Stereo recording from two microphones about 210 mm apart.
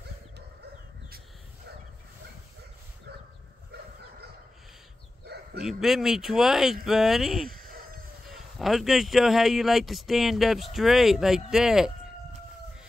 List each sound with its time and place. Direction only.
3.1 s dog: 50° right (ahead or behind)
3.7 s a sound: 50° right (ahead or behind)
5.2 s bow-wow: 50° right (ahead or behind)
5.6 s speech: centre (ahead or behind)